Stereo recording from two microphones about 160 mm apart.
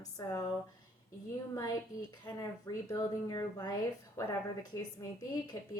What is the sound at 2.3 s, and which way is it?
A woman's voice, 20° left (ahead or behind).